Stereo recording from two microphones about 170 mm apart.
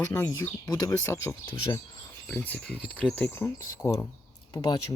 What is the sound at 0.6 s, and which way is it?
Speech, 20° left (ahead or behind).